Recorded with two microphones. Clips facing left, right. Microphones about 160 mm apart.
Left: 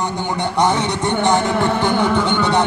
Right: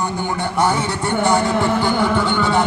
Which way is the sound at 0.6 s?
20° left (ahead or behind).